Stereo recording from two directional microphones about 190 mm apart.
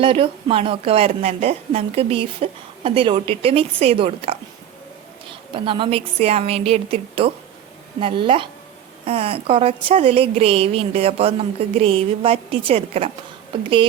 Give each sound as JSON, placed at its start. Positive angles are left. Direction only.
{"t": 0.0, "sound": "a woman's voice", "side_deg": -30}